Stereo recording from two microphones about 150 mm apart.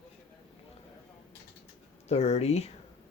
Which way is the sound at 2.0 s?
45° left (ahead or behind).